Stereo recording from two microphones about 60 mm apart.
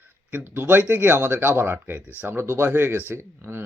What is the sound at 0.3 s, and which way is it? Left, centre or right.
Speech, right.